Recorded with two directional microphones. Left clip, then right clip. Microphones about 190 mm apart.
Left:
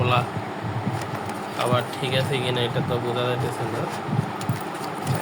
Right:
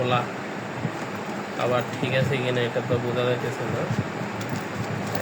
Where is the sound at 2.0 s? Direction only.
35° left (ahead or behind).